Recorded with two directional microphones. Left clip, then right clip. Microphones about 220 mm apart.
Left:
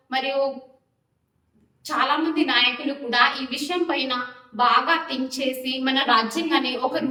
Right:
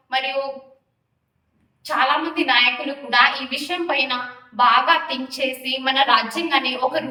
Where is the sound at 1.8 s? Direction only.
10° left (ahead or behind).